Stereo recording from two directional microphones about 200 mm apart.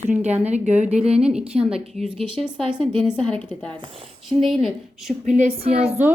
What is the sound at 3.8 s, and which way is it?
Speech, 30° right (ahead or behind).